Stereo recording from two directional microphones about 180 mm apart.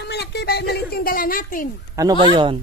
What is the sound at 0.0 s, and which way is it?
Speech, 65° left (ahead or behind).